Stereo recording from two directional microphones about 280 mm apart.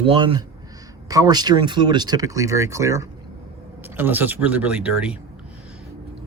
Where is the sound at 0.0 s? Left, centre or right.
Centre.